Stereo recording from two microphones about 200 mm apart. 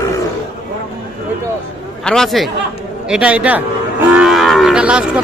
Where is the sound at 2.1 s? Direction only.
Centre (ahead or behind).